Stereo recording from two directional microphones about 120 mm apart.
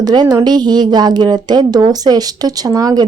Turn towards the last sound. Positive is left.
turn(degrees=-30)  # may be behind; listen again after turning